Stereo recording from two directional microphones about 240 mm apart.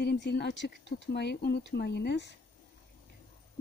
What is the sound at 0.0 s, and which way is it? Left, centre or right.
Speech, left.